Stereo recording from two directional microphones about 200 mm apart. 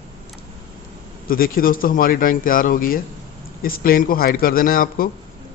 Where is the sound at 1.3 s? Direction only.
45° left (ahead or behind).